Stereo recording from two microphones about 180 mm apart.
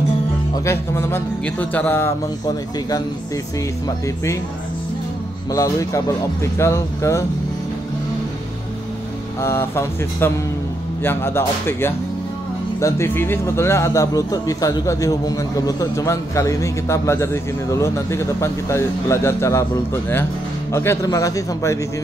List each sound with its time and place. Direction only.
0.7 s speech: 15° left (ahead or behind)
5.5 s speech: 20° left (ahead or behind)
9.4 s a man's voice: 15° left (ahead or behind)